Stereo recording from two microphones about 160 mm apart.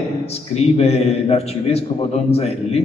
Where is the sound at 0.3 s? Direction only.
40° left (ahead or behind).